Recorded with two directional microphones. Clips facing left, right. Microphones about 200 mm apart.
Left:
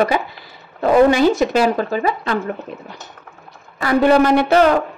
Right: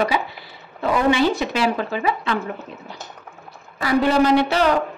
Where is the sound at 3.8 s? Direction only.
55° left (ahead or behind).